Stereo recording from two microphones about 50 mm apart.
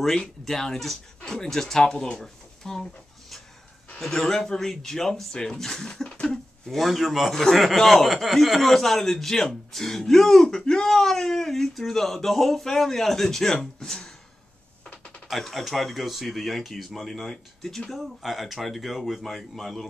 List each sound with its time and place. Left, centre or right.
0.0 s speech: centre
4.1 s speech: centre
6.2 s a man's voice: centre
15.2 s a man's voice: centre